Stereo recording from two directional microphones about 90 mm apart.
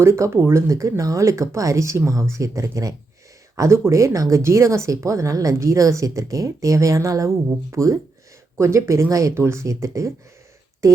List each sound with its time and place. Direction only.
0.0 s speech: 30° right (ahead or behind)